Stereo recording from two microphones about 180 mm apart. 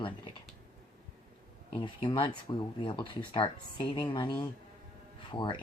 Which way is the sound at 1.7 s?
30° left (ahead or behind).